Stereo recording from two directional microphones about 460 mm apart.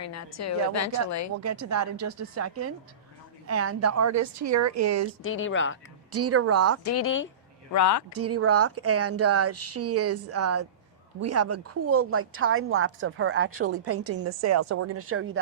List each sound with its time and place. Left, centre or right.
0.0 s a woman's voice: left
1.4 s speech: right
5.2 s speech: left
6.1 s speech: right
6.8 s speech: left
7.7 s a woman's voice: left
8.1 s a woman's voice: right